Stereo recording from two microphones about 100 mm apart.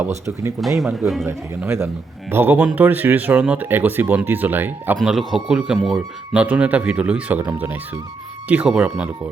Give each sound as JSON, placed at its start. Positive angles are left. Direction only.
{"t": 0.6, "sound": "speech", "side_deg": 0}
{"t": 1.3, "sound": "speech", "side_deg": -25}
{"t": 4.9, "sound": "speech", "side_deg": 0}
{"t": 6.3, "sound": "speech", "side_deg": -15}